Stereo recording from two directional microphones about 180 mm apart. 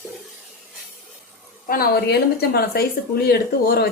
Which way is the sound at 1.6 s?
55° left (ahead or behind).